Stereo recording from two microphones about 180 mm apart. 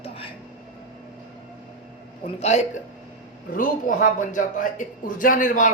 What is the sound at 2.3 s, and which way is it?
Speech, 35° left (ahead or behind).